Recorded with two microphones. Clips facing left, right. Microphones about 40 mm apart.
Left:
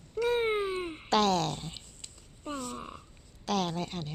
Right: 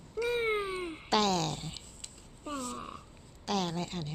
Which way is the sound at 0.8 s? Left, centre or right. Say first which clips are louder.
Left 1 dB; centre.